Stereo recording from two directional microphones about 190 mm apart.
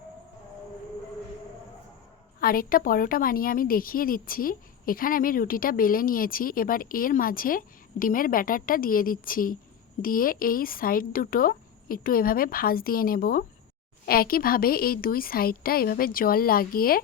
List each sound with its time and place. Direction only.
2.4 s a woman's voice: 50° left (ahead or behind)